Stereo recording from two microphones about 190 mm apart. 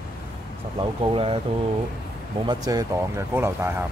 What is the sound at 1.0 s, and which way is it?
Speech, 25° right (ahead or behind).